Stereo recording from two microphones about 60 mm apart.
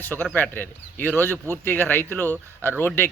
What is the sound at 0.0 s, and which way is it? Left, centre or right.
Speech, left.